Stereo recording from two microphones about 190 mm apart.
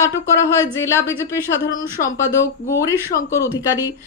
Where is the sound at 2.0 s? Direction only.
15° left (ahead or behind).